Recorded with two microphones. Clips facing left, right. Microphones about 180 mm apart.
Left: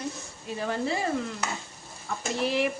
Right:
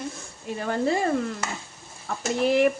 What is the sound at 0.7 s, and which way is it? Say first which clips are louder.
Speech: right 6 dB; 50° right (ahead or behind).